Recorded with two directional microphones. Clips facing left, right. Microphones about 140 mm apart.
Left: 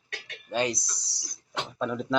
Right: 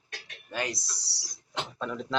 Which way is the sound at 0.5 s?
20° left (ahead or behind).